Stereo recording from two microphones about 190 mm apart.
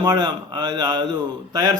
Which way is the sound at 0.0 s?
20° right (ahead or behind).